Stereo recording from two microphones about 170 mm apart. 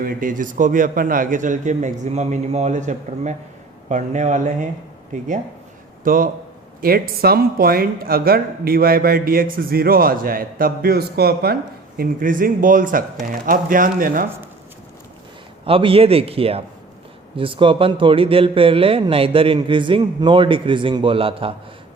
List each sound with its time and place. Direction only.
0.0 s a man's voice: 55° right (ahead or behind)
6.1 s speech: 55° right (ahead or behind)
11.9 s a man's voice: 55° right (ahead or behind)
15.6 s a man's voice: 30° right (ahead or behind)